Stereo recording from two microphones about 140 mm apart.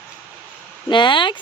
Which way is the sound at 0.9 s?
35° left (ahead or behind).